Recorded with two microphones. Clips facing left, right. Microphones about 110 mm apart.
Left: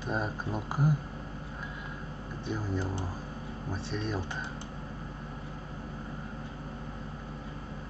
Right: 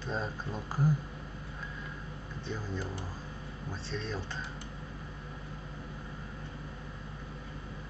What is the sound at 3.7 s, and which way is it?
Speech, 15° left (ahead or behind).